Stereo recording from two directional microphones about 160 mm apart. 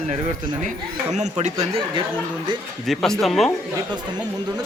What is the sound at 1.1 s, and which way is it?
Speech, 45° right (ahead or behind).